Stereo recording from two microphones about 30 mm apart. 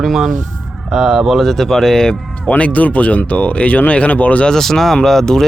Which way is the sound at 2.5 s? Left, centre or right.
Left.